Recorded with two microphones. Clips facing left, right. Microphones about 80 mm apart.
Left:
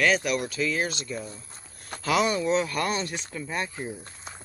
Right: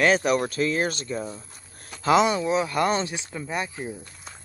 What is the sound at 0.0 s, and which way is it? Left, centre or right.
Speech, right.